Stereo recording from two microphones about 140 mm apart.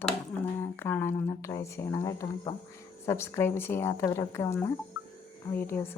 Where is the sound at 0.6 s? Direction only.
15° left (ahead or behind).